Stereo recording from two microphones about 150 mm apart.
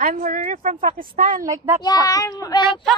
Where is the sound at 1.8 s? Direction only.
25° left (ahead or behind).